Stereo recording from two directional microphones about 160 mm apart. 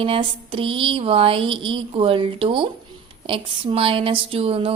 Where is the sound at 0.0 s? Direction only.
35° right (ahead or behind).